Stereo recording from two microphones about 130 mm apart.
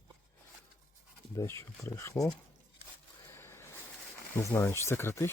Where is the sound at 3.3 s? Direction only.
20° left (ahead or behind).